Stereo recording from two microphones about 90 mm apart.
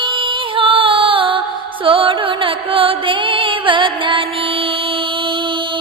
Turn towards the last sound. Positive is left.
turn(degrees=-70)  # may be behind; listen again after turning